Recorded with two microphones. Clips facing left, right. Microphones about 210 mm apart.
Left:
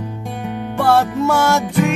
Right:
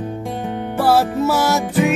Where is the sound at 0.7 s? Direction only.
5° right (ahead or behind).